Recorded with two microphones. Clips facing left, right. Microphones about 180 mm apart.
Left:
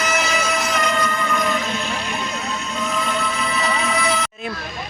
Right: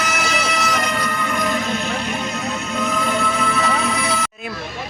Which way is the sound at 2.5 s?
55° right (ahead or behind).